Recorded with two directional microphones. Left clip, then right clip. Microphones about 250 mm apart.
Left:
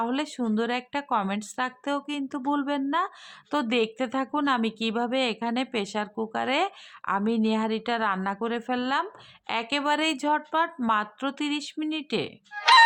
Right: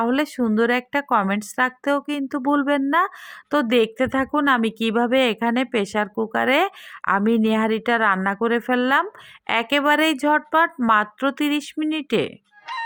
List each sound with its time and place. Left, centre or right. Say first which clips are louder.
0.0 s speech: right 7 dB; right
12.5 s music: left 16 dB; left